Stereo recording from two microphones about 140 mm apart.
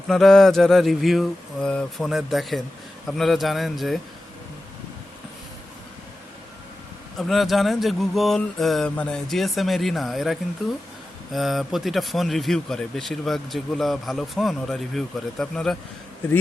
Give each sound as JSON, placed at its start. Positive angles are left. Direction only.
{"t": 0.1, "sound": "speech", "side_deg": 5}
{"t": 7.2, "sound": "speech", "side_deg": 0}